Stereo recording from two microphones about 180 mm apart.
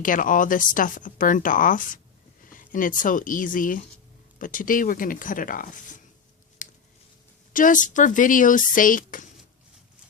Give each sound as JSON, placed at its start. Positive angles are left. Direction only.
{"t": 0.0, "sound": "speech", "side_deg": 50}
{"t": 6.6, "sound": "a sound", "side_deg": 45}
{"t": 7.5, "sound": "speech", "side_deg": 45}